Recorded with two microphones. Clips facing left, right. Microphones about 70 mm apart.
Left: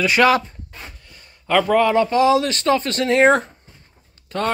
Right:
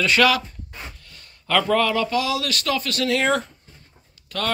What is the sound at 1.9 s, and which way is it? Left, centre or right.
Speech, left.